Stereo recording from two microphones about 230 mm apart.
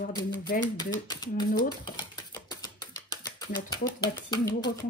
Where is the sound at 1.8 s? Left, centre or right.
Centre.